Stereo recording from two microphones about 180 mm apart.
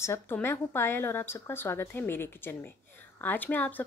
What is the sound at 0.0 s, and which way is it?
Speech, 15° left (ahead or behind).